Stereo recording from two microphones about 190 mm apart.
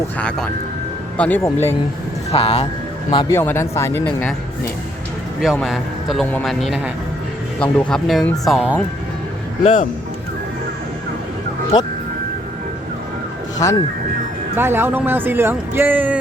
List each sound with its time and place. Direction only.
0.2 s speech: 5° left (ahead or behind)
2.3 s speech: 30° left (ahead or behind)
3.3 s speech: 15° left (ahead or behind)
5.4 s speech: centre (ahead or behind)
13.6 s speech: 15° left (ahead or behind)
14.5 s speech: 10° right (ahead or behind)